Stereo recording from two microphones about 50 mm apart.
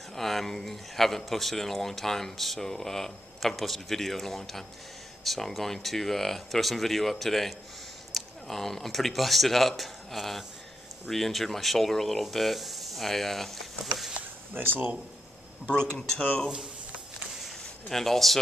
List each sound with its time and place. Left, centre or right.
0.1 s speech: centre
14.5 s speech: right
15.7 s speech: centre
17.5 s a sound: centre